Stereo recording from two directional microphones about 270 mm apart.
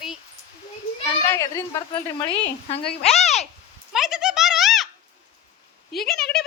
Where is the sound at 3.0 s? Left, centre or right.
Left.